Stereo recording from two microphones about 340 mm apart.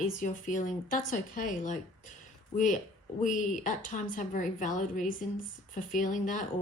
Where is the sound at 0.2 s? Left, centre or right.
Left.